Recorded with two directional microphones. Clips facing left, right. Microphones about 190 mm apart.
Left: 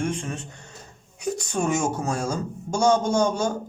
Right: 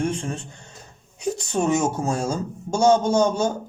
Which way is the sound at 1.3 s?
25° right (ahead or behind).